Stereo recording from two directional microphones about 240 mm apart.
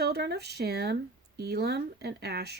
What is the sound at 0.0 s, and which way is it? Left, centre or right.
Speech, right.